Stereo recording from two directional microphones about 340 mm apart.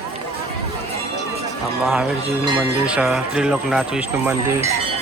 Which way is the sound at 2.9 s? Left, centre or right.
Centre.